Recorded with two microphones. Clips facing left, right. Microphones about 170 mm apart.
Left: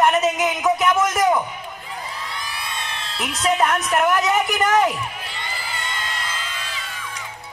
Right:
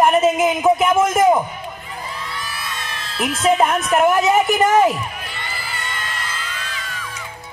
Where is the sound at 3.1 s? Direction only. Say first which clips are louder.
Right 7 dB; 50° right (ahead or behind).